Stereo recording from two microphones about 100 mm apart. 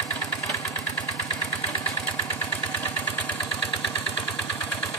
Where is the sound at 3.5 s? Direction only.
60° left (ahead or behind).